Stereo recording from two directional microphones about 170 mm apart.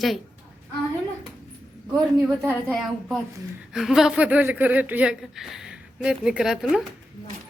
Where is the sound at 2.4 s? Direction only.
15° right (ahead or behind).